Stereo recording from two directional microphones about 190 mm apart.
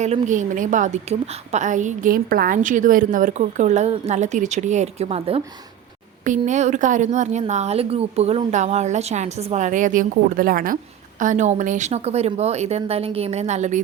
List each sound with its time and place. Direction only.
0.0 s a woman's voice: 40° right (ahead or behind)
6.2 s a woman's voice: 40° right (ahead or behind)